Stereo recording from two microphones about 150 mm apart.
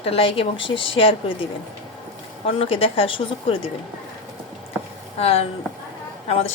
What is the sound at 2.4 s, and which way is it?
A woman's voice, 40° left (ahead or behind).